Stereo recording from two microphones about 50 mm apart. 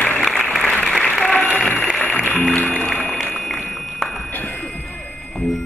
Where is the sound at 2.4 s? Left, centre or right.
Left.